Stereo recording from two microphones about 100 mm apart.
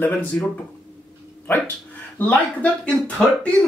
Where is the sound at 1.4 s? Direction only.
20° left (ahead or behind).